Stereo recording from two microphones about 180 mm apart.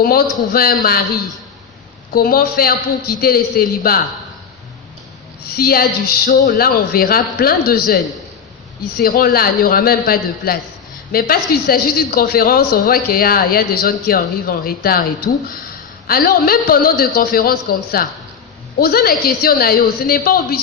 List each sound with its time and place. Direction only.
0.0 s a man's voice: 55° left (ahead or behind)
2.1 s a man's voice: 55° left (ahead or behind)
5.5 s a man's voice: 55° left (ahead or behind)
6.2 s a man's voice: 45° left (ahead or behind)
9.0 s a man's voice: 55° left (ahead or behind)